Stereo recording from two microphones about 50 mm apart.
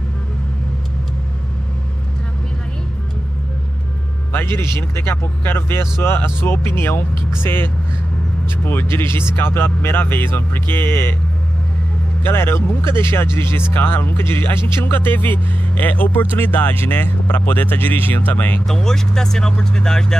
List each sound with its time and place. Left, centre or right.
4.3 s vehicle: left
5.0 s speech: left
12.2 s speech: left
18.7 s speech: centre